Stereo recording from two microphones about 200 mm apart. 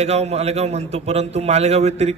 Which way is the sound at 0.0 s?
30° right (ahead or behind).